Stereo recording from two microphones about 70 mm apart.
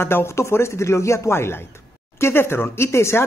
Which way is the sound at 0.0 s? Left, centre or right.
Left.